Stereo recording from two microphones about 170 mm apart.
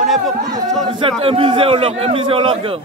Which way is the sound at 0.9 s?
30° right (ahead or behind).